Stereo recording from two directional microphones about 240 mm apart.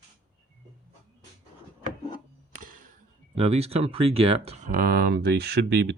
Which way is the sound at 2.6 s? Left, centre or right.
Right.